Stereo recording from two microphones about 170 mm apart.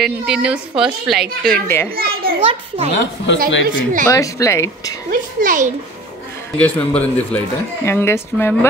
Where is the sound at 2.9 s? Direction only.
90° left.